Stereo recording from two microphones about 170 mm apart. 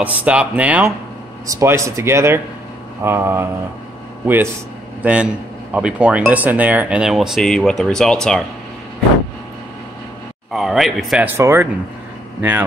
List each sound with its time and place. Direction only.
0.0 s speech: 10° right (ahead or behind)
5.0 s speech: 5° right (ahead or behind)
10.5 s speech: centre (ahead or behind)